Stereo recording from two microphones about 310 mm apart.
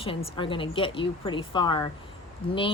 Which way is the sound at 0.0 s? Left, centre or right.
Centre.